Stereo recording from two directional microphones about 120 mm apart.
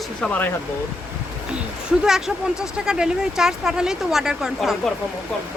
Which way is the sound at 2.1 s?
5° right (ahead or behind).